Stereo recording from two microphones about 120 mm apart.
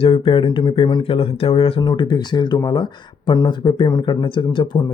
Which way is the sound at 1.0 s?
50° left (ahead or behind).